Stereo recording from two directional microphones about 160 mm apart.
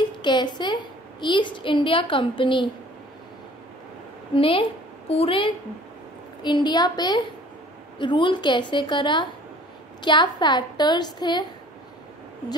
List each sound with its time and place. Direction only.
0.2 s a woman's voice: 30° left (ahead or behind)
4.4 s a woman's voice: 35° left (ahead or behind)